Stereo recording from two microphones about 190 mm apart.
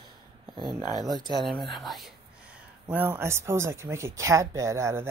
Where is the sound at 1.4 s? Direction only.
Centre (ahead or behind).